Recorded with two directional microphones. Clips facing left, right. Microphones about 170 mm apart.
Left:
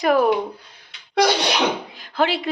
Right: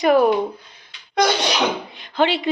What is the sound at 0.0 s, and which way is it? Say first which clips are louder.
Speech: right 3 dB; centre (ahead or behind).